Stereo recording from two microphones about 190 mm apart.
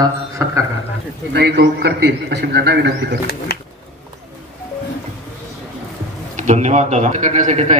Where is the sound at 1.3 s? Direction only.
60° right (ahead or behind).